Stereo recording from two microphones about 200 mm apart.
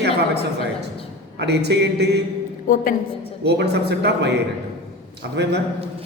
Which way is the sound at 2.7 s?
40° left (ahead or behind).